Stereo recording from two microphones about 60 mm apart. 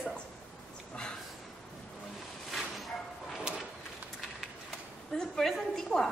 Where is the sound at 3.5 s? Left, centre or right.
Centre.